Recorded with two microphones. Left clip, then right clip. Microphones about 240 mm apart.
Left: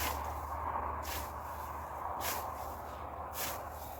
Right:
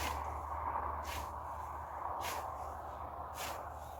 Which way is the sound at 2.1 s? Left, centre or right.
Centre.